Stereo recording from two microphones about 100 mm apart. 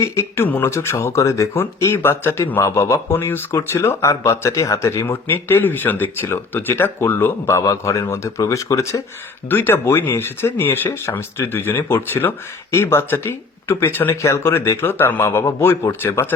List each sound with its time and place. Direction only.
0.0 s speech: 30° left (ahead or behind)
9.5 s speech: 20° left (ahead or behind)